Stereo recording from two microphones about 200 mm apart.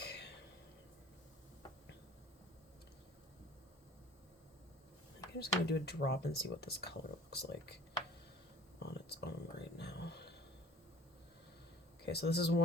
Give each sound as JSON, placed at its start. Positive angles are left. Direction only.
{"t": 0.0, "sound": "a sound", "side_deg": 55}
{"t": 5.4, "sound": "speech", "side_deg": 55}
{"t": 8.8, "sound": "speech", "side_deg": 55}
{"t": 12.0, "sound": "speech", "side_deg": 55}